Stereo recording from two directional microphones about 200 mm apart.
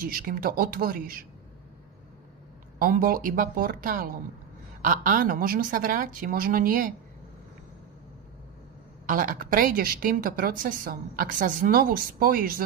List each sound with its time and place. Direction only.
0.0 s a woman's voice: 45° right (ahead or behind)
2.8 s a woman's voice: 45° right (ahead or behind)
9.0 s a woman's voice: 45° right (ahead or behind)